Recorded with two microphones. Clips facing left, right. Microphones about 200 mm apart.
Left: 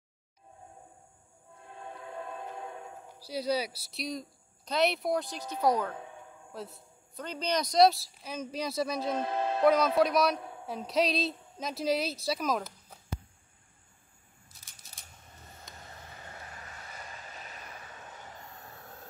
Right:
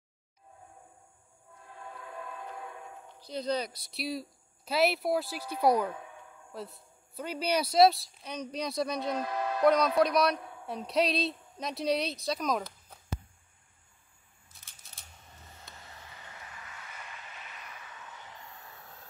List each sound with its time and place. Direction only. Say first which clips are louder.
1.8 s a sound: left 2 dB; 25° left (ahead or behind)
3.2 s a man's voice: left 1 dB; 10° left (ahead or behind); by 5.9 s 10° right (ahead or behind)
6.5 s a man's voice: right 1 dB; centre (ahead or behind)
9.1 s music: left 2 dB; 25° left (ahead or behind)
9.7 s a man's voice: even; 5° left (ahead or behind)
16.2 s vehicle: left 3 dB; 40° left (ahead or behind)